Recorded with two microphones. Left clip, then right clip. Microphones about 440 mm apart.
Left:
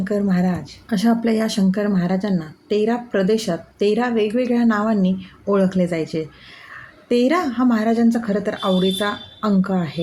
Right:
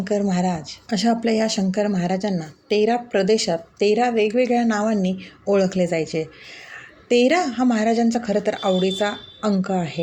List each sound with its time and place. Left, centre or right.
0.0 s speech: left